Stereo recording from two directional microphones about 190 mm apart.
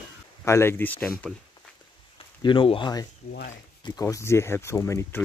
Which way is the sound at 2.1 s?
25° left (ahead or behind).